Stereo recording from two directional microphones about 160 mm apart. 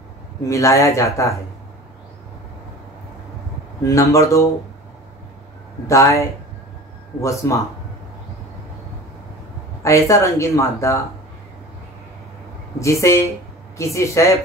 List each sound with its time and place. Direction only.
0.5 s speech: 20° left (ahead or behind)
3.8 s speech: 20° left (ahead or behind)
5.9 s speech: 20° left (ahead or behind)
9.8 s speech: 20° left (ahead or behind)
12.7 s speech: 20° left (ahead or behind)